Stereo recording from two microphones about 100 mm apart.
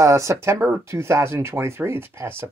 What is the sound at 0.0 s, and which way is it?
Speech, 30° right (ahead or behind).